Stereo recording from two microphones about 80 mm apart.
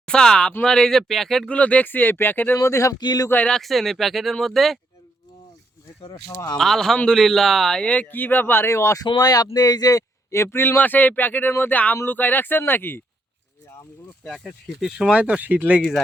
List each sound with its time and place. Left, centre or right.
0.0 s speech: centre
1.5 s speech: centre
2.6 s speech: left
3.0 s speech: left
3.4 s speech: centre
6.2 s speech: left
6.6 s a man's voice: centre; by 9.0 s left
9.2 s speech: left
10.3 s speech: left
14.3 s speech: centre